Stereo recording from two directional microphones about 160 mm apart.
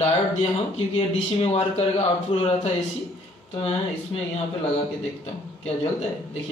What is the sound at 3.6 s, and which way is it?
Speech, 40° left (ahead or behind).